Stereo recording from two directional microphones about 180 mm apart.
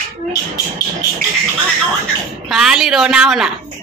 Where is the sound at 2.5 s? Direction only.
5° right (ahead or behind).